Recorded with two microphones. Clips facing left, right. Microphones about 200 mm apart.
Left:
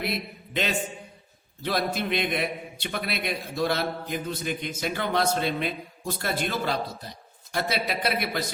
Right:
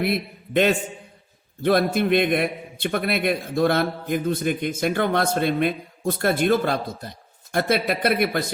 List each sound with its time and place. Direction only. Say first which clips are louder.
0.0 s a man's voice: right 7 dB; 55° right (ahead or behind)